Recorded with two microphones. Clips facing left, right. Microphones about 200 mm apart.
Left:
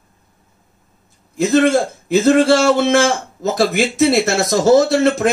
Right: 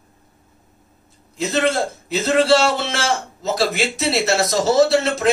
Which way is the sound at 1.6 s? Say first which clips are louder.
Left 5 dB; 50° left (ahead or behind).